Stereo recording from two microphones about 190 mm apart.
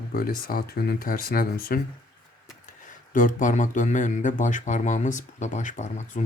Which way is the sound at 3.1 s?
45° left (ahead or behind).